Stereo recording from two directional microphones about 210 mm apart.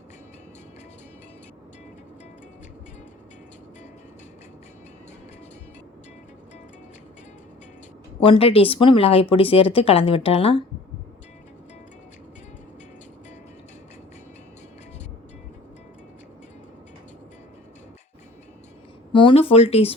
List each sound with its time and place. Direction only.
8.2 s speech: 25° left (ahead or behind)
19.1 s speech: 25° left (ahead or behind)